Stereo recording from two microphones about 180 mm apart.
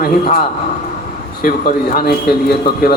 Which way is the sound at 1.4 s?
50° left (ahead or behind).